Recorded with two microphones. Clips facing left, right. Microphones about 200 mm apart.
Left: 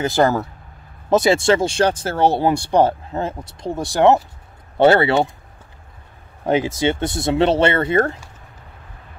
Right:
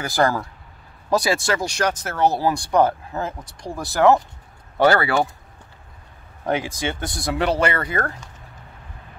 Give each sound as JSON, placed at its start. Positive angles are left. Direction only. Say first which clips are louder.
{"t": 0.0, "sound": "speech", "louder": "left 4 dB", "side_deg": 20}
{"t": 6.4, "sound": "speech", "louder": "left 6 dB", "side_deg": 25}